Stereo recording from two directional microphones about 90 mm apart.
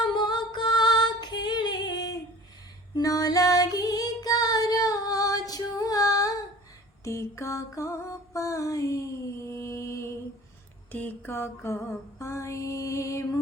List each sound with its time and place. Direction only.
0.1 s music: 55° left (ahead or behind)
2.9 s female singing: 40° left (ahead or behind)
7.0 s mantra: 35° left (ahead or behind)
10.9 s mantra: 20° left (ahead or behind)